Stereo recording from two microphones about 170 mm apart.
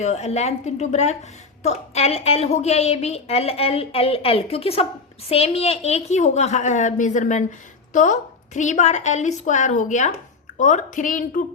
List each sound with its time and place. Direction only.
0.0 s a woman's voice: 40° left (ahead or behind)